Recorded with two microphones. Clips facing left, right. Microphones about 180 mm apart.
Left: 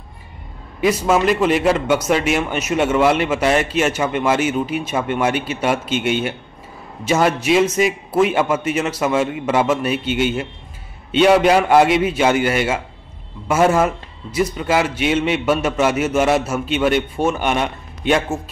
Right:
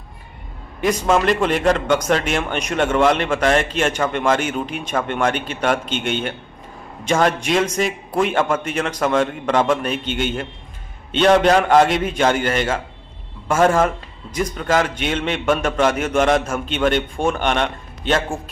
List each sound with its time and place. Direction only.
0.7 s a man's voice: 5° left (ahead or behind)